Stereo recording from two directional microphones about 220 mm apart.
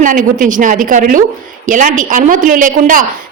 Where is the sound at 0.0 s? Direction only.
40° right (ahead or behind).